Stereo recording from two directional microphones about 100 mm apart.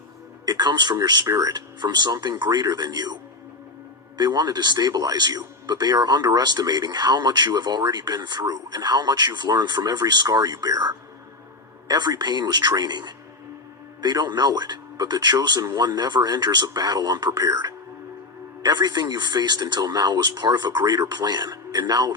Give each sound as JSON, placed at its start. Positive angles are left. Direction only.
{"t": 0.4, "sound": "speech", "side_deg": -45}
{"t": 4.2, "sound": "speech", "side_deg": -45}